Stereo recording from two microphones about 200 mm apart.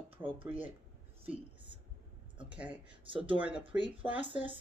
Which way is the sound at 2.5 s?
5° right (ahead or behind).